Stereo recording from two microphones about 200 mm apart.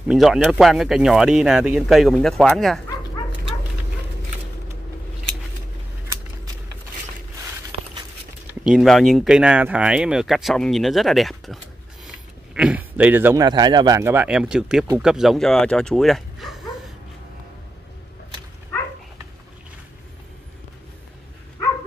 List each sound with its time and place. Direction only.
0.1 s speech: centre (ahead or behind)
7.7 s a sound: 30° right (ahead or behind)
8.6 s speech: centre (ahead or behind)